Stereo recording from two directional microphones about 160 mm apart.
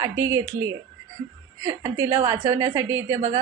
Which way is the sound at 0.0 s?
20° right (ahead or behind).